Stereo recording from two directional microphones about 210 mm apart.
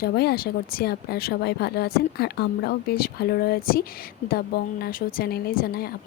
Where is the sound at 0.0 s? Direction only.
50° left (ahead or behind).